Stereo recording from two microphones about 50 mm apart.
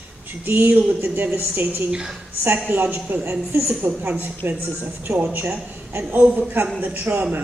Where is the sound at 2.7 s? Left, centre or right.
Right.